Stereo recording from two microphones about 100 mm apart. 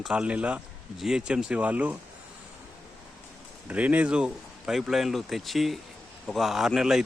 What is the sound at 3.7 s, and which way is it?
Speech, 15° right (ahead or behind).